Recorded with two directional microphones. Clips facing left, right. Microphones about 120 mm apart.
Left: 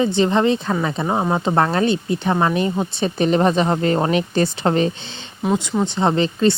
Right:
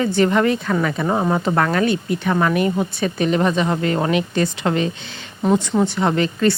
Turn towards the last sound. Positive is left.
turn(degrees=25)  # may be behind; listen again after turning